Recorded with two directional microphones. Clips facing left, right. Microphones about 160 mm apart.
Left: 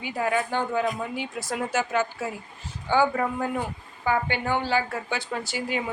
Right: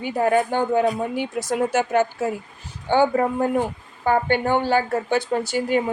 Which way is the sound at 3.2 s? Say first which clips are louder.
Right 6 dB; 35° right (ahead or behind).